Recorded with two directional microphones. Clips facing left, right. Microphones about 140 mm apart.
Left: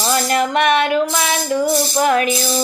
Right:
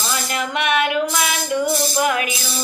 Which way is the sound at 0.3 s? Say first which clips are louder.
Left 5 dB; 40° left (ahead or behind).